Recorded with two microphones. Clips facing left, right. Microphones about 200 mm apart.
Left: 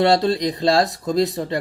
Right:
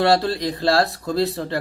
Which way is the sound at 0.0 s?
20° left (ahead or behind).